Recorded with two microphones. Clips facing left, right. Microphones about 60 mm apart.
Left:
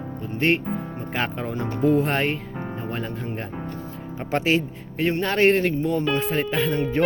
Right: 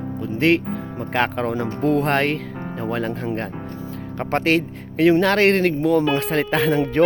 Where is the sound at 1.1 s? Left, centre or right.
Right.